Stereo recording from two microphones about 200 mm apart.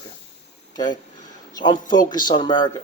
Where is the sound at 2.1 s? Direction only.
20° left (ahead or behind).